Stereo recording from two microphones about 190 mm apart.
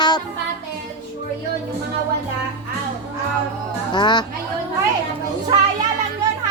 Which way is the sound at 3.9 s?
25° left (ahead or behind).